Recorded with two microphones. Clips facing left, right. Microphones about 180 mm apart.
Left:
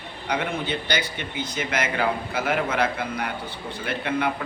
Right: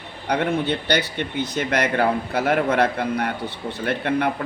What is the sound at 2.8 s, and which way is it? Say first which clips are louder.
A man's voice: right 5 dB; 50° right (ahead or behind).